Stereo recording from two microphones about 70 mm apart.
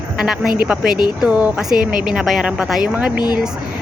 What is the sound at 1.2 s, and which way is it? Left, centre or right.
Speech, centre.